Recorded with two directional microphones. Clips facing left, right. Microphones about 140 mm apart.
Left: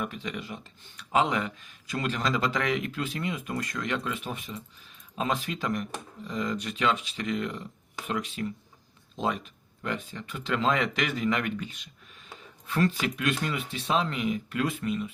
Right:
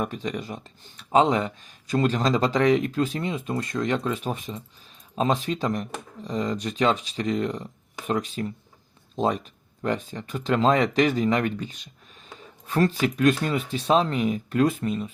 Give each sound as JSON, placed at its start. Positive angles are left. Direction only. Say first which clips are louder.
{"t": 0.0, "sound": "speech", "louder": "right 5 dB", "side_deg": -35}